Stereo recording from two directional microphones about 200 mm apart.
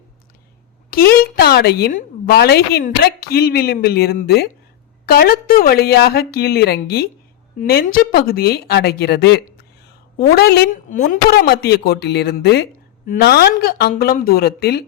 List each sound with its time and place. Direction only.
0.9 s a woman's voice: 45° left (ahead or behind)